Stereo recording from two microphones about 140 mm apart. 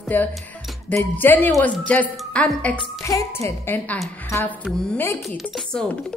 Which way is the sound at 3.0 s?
20° left (ahead or behind).